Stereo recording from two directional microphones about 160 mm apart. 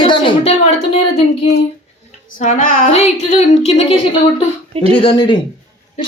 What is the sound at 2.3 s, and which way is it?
Female singing, 55° left (ahead or behind).